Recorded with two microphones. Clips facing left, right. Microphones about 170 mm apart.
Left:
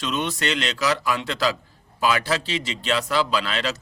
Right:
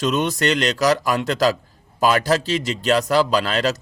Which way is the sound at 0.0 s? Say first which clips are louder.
Right 6 dB; 40° right (ahead or behind).